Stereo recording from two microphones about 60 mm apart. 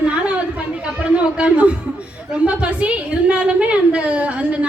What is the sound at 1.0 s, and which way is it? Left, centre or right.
A man's voice, centre.